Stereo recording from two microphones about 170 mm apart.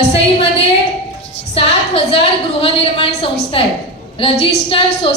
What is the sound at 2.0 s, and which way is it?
A woman's voice, 35° left (ahead or behind).